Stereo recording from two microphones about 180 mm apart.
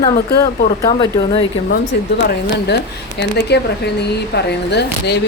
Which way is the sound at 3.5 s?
65° left (ahead or behind).